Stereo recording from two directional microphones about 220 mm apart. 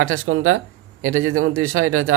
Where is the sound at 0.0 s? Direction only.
70° right (ahead or behind).